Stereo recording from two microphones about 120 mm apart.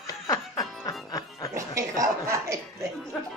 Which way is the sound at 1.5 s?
25° right (ahead or behind).